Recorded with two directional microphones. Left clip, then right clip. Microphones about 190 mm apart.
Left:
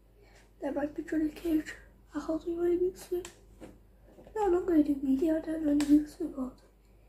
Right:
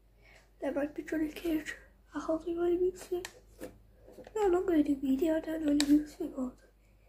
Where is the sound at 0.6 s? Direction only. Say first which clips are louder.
Even; 30° right (ahead or behind).